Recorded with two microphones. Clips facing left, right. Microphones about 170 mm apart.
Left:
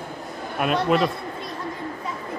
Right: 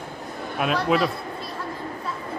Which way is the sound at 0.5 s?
Centre (ahead or behind).